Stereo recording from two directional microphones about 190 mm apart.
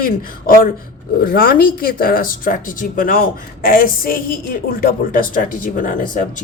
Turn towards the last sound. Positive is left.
turn(degrees=45)  # may be behind; listen again after turning